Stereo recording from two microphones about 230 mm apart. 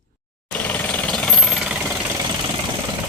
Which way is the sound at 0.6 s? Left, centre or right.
Centre.